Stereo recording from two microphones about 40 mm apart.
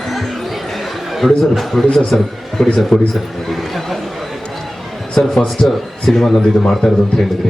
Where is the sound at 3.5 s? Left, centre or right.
Centre.